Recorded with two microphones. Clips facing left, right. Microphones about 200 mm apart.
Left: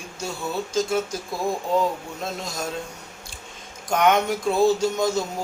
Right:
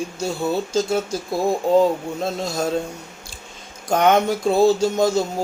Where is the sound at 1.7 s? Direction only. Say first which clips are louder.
Right 8 dB; 30° right (ahead or behind).